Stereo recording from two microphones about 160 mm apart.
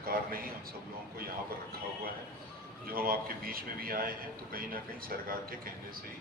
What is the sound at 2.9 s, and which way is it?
Speech, 65° right (ahead or behind).